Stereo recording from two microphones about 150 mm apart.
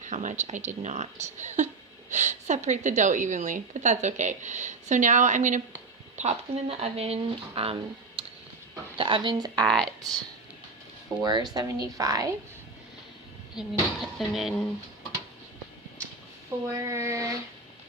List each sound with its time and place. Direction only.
0.0 s a woman's voice: 55° right (ahead or behind)
6.1 s speech: 45° right (ahead or behind); by 9.6 s 30° right (ahead or behind)
9.6 s speech: 5° left (ahead or behind)
11.2 s a woman's voice: 30° right (ahead or behind)
13.6 s speech: centre (ahead or behind)
16.6 s a woman's voice: 20° right (ahead or behind)